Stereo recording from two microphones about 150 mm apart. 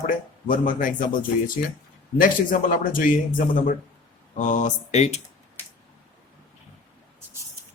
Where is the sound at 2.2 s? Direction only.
65° left (ahead or behind); by 5.2 s 45° left (ahead or behind).